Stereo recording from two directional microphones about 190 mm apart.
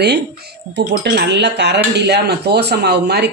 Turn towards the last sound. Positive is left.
turn(degrees=-60)  # may be behind; listen again after turning